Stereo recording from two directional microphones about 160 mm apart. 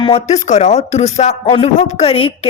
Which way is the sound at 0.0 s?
40° left (ahead or behind).